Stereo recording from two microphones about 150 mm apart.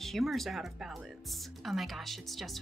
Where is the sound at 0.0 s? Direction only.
Centre (ahead or behind).